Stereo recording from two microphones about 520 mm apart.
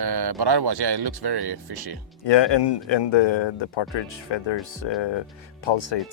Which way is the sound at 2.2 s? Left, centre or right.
Left.